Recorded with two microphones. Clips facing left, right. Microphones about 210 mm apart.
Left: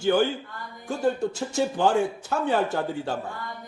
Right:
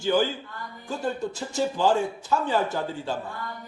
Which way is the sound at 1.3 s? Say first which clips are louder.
Left 2 dB; 60° left (ahead or behind).